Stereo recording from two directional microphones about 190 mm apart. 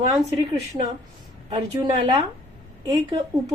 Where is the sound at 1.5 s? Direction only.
25° right (ahead or behind).